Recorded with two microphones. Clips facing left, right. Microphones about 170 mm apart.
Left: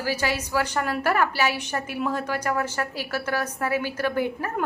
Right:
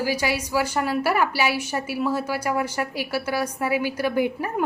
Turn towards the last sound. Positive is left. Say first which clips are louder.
# right 2 dB
turn(degrees=-15)  # may be behind; listen again after turning